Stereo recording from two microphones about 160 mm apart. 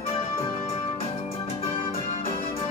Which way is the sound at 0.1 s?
35° left (ahead or behind).